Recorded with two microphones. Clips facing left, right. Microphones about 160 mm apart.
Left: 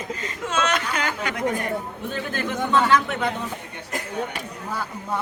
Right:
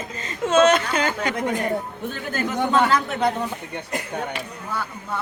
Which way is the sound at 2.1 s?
40° right (ahead or behind).